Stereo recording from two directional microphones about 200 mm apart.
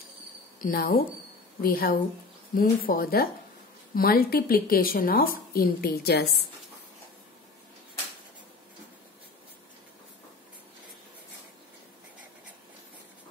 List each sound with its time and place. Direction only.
0.6 s a woman's voice: 45° left (ahead or behind)